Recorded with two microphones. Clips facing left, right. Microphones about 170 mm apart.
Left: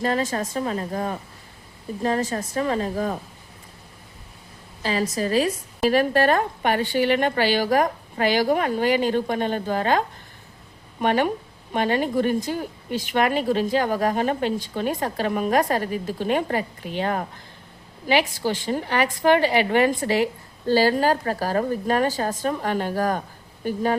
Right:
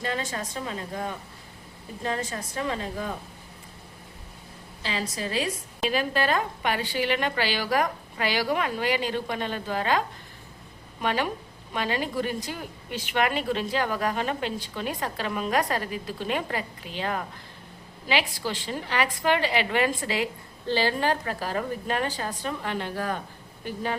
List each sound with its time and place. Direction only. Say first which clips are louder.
0.0 s a woman's voice: left 7 dB; 40° left (ahead or behind)
4.8 s a woman's voice: left 7 dB; 45° left (ahead or behind)
5.9 s a woman's voice: left 6 dB; 55° left (ahead or behind)
11.0 s a woman's voice: left 6 dB; 50° left (ahead or behind)